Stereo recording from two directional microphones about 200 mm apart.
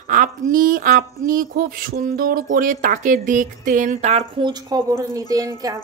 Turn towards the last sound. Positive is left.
turn(degrees=-15)  # may be behind; listen again after turning